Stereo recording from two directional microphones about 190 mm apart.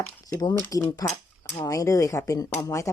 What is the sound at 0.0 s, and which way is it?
Speech, 10° left (ahead or behind).